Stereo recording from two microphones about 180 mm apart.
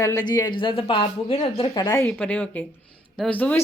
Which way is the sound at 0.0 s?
20° left (ahead or behind).